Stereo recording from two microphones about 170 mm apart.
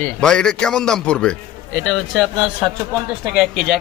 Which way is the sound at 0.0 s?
5° left (ahead or behind).